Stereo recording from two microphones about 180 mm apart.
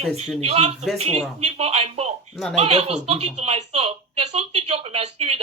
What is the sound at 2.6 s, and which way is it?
Speech, 35° right (ahead or behind).